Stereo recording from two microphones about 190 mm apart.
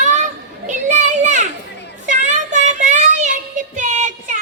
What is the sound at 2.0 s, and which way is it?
Child singing, 40° right (ahead or behind).